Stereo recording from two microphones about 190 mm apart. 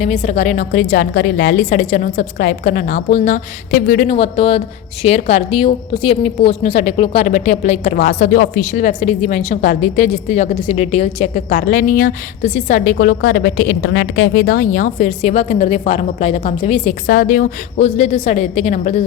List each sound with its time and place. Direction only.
0.0 s a woman's voice: 35° left (ahead or behind)
17.1 s a woman's voice: 45° left (ahead or behind)